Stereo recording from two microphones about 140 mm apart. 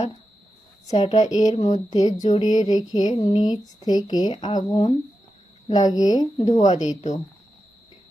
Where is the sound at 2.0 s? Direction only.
50° left (ahead or behind).